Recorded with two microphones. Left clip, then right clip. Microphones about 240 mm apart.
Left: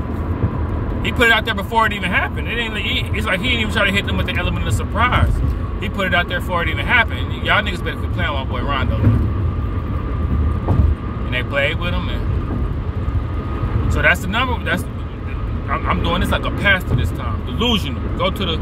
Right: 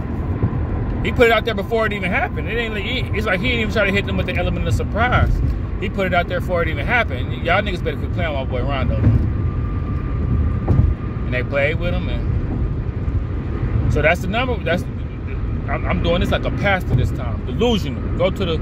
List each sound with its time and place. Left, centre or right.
1.0 s speech: left
11.3 s speech: left
13.8 s speech: left
18.2 s speech: left